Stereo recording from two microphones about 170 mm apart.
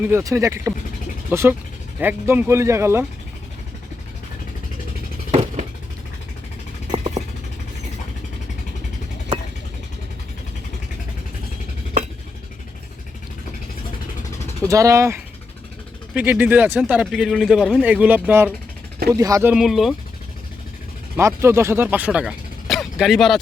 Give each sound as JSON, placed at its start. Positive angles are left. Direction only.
{"t": 0.0, "sound": "speech", "side_deg": -15}
{"t": 5.3, "sound": "a sound", "side_deg": -40}
{"t": 6.9, "sound": "a sound", "side_deg": -45}
{"t": 14.7, "sound": "speech", "side_deg": -20}
{"t": 19.5, "sound": "speech", "side_deg": 0}
{"t": 21.2, "sound": "speech", "side_deg": -15}